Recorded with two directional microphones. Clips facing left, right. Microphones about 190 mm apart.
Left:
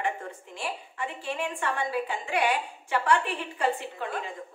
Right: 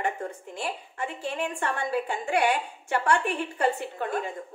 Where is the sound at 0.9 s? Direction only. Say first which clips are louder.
Right 2 dB; 45° right (ahead or behind).